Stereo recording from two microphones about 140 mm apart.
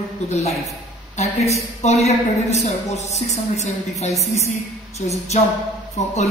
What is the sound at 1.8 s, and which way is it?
A woman's voice, 50° left (ahead or behind).